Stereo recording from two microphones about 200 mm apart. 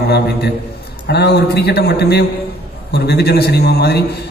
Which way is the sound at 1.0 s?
55° left (ahead or behind).